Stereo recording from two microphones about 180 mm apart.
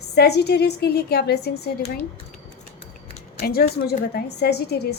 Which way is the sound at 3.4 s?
55° left (ahead or behind).